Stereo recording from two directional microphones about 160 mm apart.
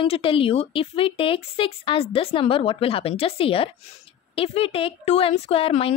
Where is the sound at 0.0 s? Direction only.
35° left (ahead or behind).